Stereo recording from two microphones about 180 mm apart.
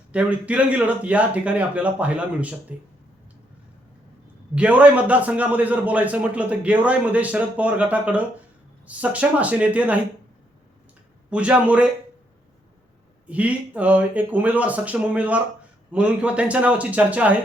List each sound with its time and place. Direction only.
0.1 s a man's voice: 5° right (ahead or behind)
4.5 s a man's voice: 5° right (ahead or behind)
11.3 s a man's voice: 5° right (ahead or behind)
13.2 s a man's voice: 5° right (ahead or behind)